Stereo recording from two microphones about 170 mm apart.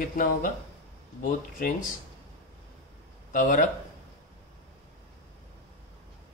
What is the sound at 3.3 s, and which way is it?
Speech, 50° left (ahead or behind).